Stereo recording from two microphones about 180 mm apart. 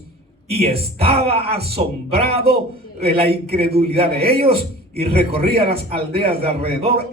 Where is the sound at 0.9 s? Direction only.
35° right (ahead or behind).